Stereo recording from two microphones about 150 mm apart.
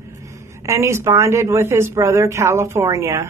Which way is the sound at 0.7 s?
20° right (ahead or behind).